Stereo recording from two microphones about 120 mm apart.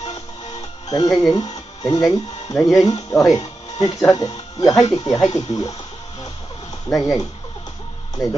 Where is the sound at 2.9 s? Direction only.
30° left (ahead or behind).